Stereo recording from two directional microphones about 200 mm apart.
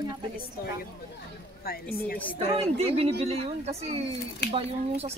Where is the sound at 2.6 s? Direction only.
30° right (ahead or behind).